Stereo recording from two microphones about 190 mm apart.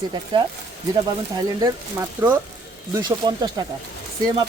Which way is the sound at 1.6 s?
15° right (ahead or behind).